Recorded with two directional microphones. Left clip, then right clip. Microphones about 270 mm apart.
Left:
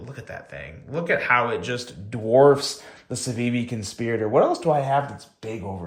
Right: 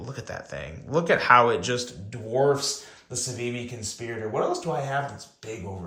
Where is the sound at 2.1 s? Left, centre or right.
Centre.